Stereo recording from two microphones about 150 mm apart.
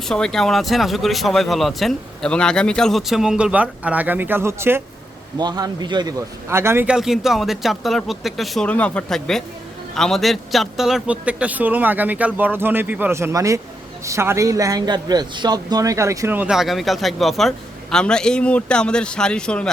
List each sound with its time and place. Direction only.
0.1 s speech: 5° left (ahead or behind); by 4.8 s 15° right (ahead or behind)
5.4 s a man's voice: 25° right (ahead or behind); by 19.7 s 5° left (ahead or behind)